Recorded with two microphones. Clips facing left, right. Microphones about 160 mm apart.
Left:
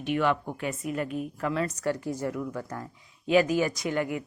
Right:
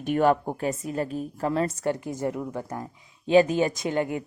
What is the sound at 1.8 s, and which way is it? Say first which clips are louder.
Speech: right 2 dB; 20° right (ahead or behind).